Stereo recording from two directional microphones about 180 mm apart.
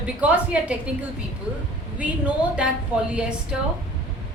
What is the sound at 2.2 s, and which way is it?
A woman's voice, 5° right (ahead or behind).